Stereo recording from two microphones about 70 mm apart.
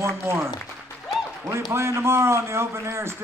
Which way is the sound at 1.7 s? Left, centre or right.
Right.